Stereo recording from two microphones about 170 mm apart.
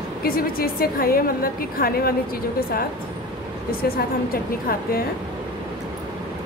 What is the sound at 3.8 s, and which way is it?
A woman's voice, 60° left (ahead or behind).